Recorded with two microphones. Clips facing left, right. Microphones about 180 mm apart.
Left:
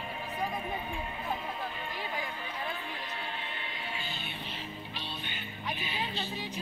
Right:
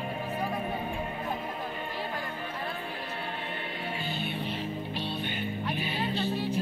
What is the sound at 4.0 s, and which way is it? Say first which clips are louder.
Music: right 7 dB; 50° right (ahead or behind).